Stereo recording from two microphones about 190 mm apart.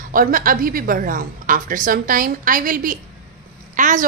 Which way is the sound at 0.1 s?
45° right (ahead or behind).